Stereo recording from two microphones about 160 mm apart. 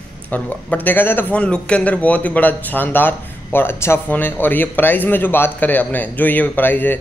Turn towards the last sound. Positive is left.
turn(degrees=10)  # may be behind; listen again after turning